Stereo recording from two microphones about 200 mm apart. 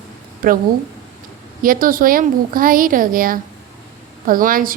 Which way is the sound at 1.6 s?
45° right (ahead or behind).